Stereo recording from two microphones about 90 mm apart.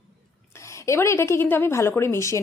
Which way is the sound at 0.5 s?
35° left (ahead or behind).